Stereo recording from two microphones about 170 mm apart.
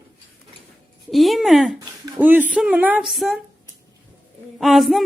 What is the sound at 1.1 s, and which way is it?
Speech, centre (ahead or behind).